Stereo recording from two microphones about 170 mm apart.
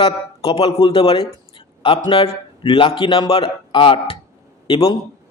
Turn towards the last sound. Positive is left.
turn(degrees=30)  # may be behind; listen again after turning